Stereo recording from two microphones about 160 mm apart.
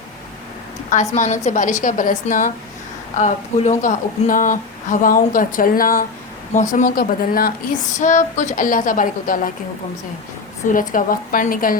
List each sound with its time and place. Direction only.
1.1 s a woman's voice: 45° left (ahead or behind); by 6.1 s 65° left (ahead or behind)
6.5 s speech: 50° left (ahead or behind)
7.9 s speech: 50° left (ahead or behind)
10.7 s speech: 60° left (ahead or behind)